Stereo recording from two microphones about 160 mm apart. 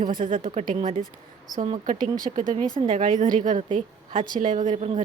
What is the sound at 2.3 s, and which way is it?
Speech, 55° right (ahead or behind).